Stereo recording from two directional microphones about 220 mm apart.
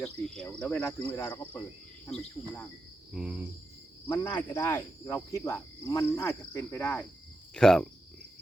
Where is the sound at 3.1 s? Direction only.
5° right (ahead or behind).